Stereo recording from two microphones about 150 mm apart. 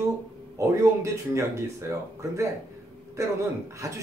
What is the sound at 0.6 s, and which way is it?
Speech, 20° right (ahead or behind).